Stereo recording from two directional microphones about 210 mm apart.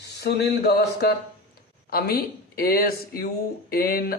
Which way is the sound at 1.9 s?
45° left (ahead or behind).